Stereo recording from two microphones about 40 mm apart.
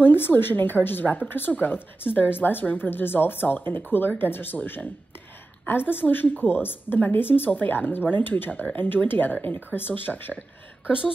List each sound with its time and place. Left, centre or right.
0.0 s a woman's voice: left
2.6 s speech: left
2.9 s a woman's voice: left
5.7 s a woman's voice: left